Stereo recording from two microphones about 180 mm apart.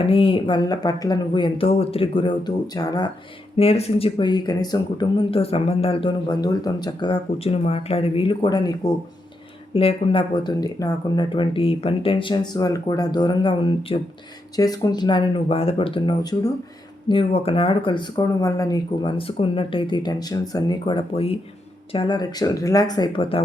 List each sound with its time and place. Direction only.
0.0 s speech: 30° left (ahead or behind)
3.6 s speech: 35° left (ahead or behind)